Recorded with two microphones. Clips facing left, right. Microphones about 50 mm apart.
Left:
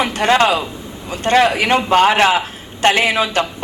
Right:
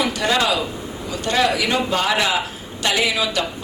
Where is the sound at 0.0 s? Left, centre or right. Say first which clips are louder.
Left 5 dB; left.